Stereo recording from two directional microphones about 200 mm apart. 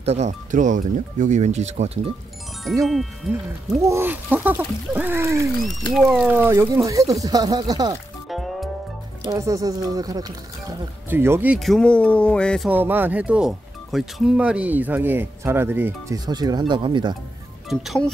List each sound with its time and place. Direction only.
0.0 s speech: 35° right (ahead or behind)
2.8 s speech: centre (ahead or behind)
3.8 s speech: 10° right (ahead or behind)
5.6 s speech: centre (ahead or behind); by 8.0 s 20° right (ahead or behind)
8.3 s music: centre (ahead or behind)
9.2 s speech: 15° right (ahead or behind); by 12.6 s 5° left (ahead or behind)
12.6 s speech: 10° right (ahead or behind)
17.6 s speech: centre (ahead or behind)